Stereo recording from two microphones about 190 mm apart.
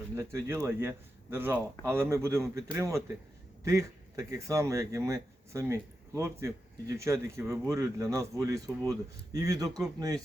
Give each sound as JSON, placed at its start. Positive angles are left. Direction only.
{"t": 0.2, "sound": "speech", "side_deg": -15}